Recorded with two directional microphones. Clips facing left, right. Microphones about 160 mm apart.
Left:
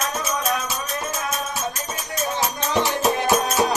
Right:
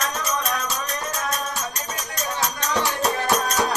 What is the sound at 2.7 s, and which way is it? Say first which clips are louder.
Music: left 3 dB; 20° left (ahead or behind).